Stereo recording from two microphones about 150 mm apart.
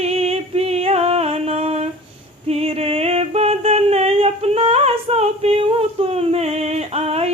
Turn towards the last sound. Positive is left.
turn(degrees=-45)  # may be behind; listen again after turning